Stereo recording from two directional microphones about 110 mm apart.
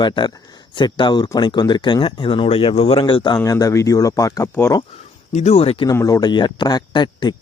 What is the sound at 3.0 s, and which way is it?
Speech, 45° left (ahead or behind).